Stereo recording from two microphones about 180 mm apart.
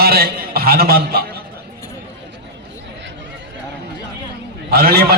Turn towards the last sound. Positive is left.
turn(degrees=-60)  # may be behind; listen again after turning